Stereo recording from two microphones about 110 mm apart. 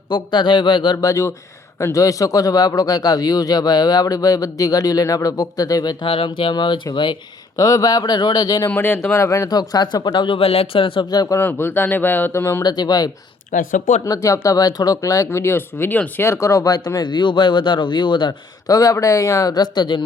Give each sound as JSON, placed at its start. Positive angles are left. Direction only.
{"t": 0.1, "sound": "speech", "side_deg": 45}
{"t": 1.0, "sound": "speech", "side_deg": 25}
{"t": 6.1, "sound": "speech", "side_deg": 55}
{"t": 7.6, "sound": "speech", "side_deg": 30}
{"t": 8.7, "sound": "speech", "side_deg": 20}
{"t": 11.1, "sound": "speech", "side_deg": 35}
{"t": 11.3, "sound": "speech", "side_deg": 20}
{"t": 12.6, "sound": "speech", "side_deg": 40}
{"t": 18.7, "sound": "speech", "side_deg": 30}